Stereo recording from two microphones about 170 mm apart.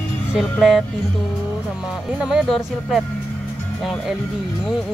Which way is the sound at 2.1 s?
5° right (ahead or behind).